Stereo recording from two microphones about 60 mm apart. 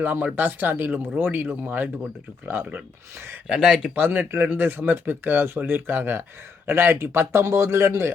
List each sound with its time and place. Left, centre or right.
0.0 s speech: right
3.4 s speech: centre
3.9 s speech: right